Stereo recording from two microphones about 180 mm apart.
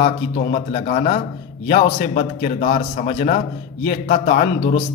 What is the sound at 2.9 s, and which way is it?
Speech, 45° left (ahead or behind).